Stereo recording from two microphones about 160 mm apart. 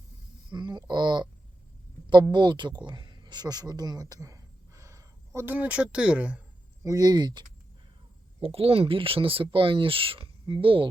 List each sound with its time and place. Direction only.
0.5 s speech: 25° right (ahead or behind)
2.3 s speech: 30° right (ahead or behind); by 6.4 s 5° right (ahead or behind)
6.8 s speech: 25° right (ahead or behind)
8.4 s speech: 35° right (ahead or behind)